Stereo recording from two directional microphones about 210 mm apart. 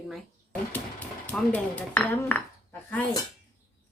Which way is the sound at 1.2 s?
5° left (ahead or behind).